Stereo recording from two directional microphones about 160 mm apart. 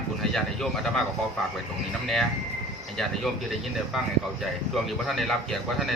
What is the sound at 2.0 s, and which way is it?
Speech, centre (ahead or behind).